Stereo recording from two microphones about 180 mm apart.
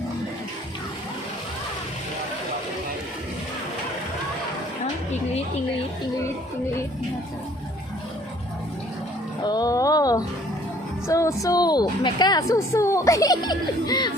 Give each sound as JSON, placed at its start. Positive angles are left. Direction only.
{"t": 9.4, "sound": "a woman's voice", "side_deg": 20}